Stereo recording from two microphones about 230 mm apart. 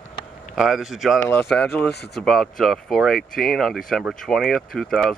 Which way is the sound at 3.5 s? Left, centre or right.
Centre.